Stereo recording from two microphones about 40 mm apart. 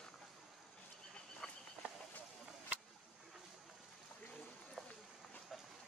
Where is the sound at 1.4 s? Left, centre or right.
Centre.